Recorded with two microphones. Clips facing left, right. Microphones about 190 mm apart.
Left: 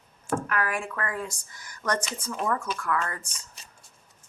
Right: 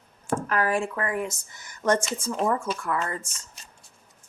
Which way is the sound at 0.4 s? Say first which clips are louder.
Right 5 dB; 35° right (ahead or behind).